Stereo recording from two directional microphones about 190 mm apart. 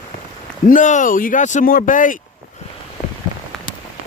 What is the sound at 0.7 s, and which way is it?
Speech, 40° left (ahead or behind).